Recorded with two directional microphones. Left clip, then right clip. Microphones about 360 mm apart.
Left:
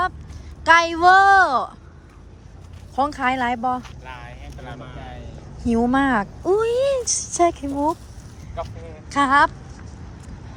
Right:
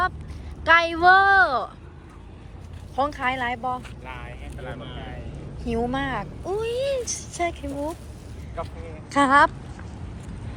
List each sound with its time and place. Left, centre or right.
0.6 s a woman's voice: centre
2.9 s a woman's voice: centre
9.0 s speech: centre